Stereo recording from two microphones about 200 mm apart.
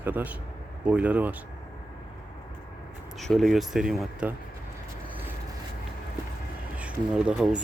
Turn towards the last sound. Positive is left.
turn(degrees=-5)  # may be behind; listen again after turning